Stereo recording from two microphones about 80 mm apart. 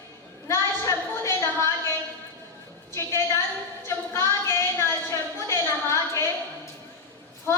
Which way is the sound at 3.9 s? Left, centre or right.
Left.